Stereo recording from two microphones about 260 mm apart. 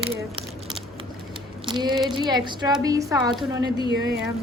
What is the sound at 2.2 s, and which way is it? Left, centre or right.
Speech, centre.